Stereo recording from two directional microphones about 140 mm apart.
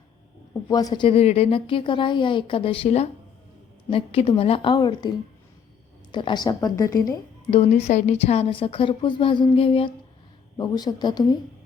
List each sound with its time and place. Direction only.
0.7 s a woman's voice: 25° left (ahead or behind)
1.0 s a woman's voice: 45° left (ahead or behind); by 5.0 s 30° left (ahead or behind)
6.1 s a woman's voice: 35° left (ahead or behind)
7.7 s a woman's voice: 55° left (ahead or behind)
10.6 s a woman's voice: 30° left (ahead or behind)